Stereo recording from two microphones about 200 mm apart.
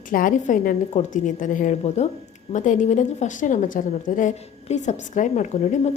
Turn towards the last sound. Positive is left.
turn(degrees=35)  # may be behind; listen again after turning